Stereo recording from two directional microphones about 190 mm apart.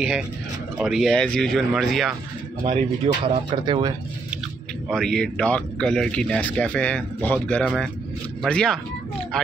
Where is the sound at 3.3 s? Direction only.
25° right (ahead or behind).